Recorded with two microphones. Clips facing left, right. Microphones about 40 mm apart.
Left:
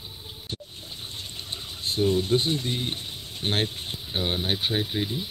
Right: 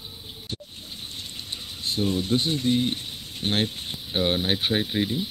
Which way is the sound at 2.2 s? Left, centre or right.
Left.